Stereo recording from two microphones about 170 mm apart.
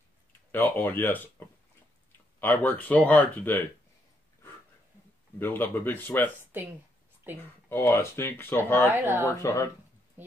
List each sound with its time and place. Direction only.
0.5 s speech: 10° left (ahead or behind)
2.4 s speech: 10° left (ahead or behind)
5.4 s speech: 10° left (ahead or behind)
7.3 s speech: 10° right (ahead or behind)
7.7 s speech: 15° left (ahead or behind)
8.9 s speech: 10° right (ahead or behind)
9.2 s speech: 15° left (ahead or behind)
10.2 s a sound: 10° right (ahead or behind)